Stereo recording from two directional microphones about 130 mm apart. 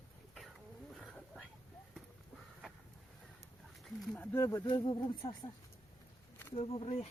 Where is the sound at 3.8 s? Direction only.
10° left (ahead or behind).